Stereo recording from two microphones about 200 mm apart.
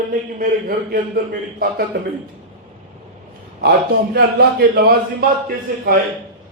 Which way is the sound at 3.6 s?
50° right (ahead or behind).